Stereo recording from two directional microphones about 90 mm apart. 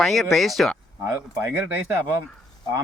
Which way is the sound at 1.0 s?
30° right (ahead or behind).